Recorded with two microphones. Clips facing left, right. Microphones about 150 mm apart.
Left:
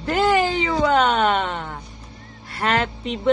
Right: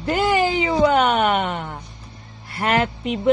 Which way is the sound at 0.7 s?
15° right (ahead or behind).